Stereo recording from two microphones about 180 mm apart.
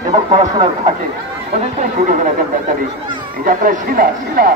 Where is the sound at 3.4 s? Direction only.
50° right (ahead or behind).